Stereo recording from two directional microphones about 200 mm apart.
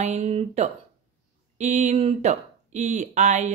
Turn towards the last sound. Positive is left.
turn(degrees=-35)  # may be behind; listen again after turning